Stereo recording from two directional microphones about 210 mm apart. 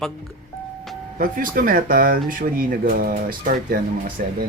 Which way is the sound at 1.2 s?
40° right (ahead or behind).